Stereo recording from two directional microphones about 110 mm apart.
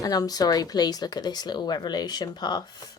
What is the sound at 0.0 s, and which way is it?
A woman's voice, 35° left (ahead or behind).